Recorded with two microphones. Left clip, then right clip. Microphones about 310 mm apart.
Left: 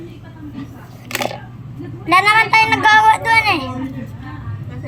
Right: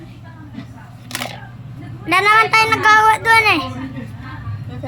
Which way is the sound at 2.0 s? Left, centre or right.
Centre.